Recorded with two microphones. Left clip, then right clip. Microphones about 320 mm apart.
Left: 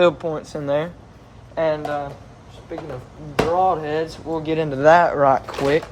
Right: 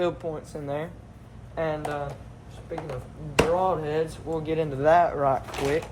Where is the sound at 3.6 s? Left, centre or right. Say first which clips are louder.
Left 5 dB; left.